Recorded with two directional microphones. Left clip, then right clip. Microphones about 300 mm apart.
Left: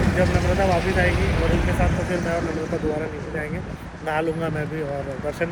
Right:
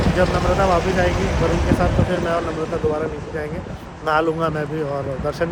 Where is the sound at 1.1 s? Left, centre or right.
Right.